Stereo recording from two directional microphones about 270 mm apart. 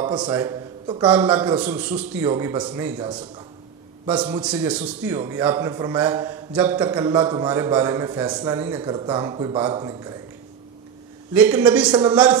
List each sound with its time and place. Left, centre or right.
0.0 s a man's voice: centre
1.1 s a man's voice: centre
4.4 s a man's voice: centre
7.0 s a man's voice: centre
11.3 s a man's voice: centre